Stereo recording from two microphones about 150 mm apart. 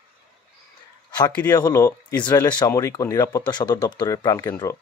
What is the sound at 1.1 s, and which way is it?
Speech, 25° left (ahead or behind).